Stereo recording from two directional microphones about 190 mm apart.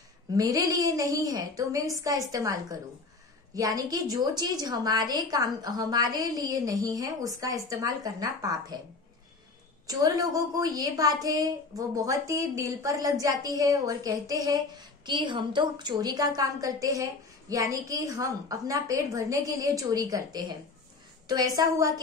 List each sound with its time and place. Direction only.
0.3 s a woman's voice: 20° right (ahead or behind)
9.8 s a woman's voice: 20° right (ahead or behind)